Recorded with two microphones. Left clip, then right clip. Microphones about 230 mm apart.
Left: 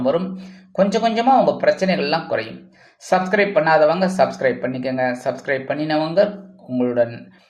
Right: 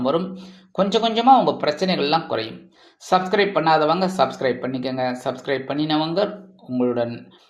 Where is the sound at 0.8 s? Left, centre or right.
Centre.